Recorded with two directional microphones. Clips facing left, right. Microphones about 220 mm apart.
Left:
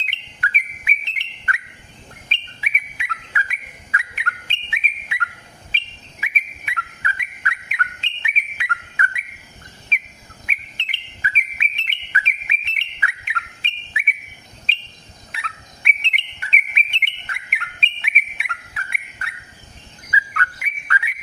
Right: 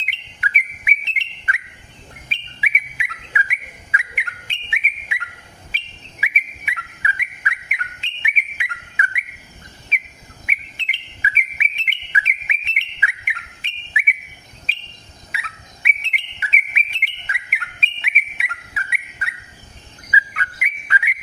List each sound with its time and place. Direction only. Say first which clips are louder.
0.0 s bird: even; 15° right (ahead or behind)
3.9 s a sound: left 1 dB; 15° right (ahead or behind)
10.4 s bird: right 2 dB; 10° right (ahead or behind)
14.7 s cricket: left 3 dB; 5° right (ahead or behind)
15.3 s bird: left 1 dB; 5° right (ahead or behind)
20.1 s bird: even; 15° right (ahead or behind)